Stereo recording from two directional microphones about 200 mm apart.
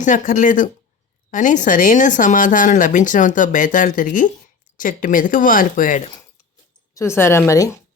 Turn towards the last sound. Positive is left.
turn(degrees=15)  # may be behind; listen again after turning